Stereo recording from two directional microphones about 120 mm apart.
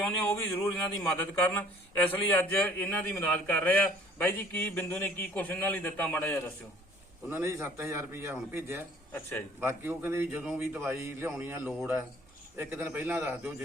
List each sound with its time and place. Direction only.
0.0 s speech: 15° left (ahead or behind)
7.3 s a man's voice: 20° right (ahead or behind)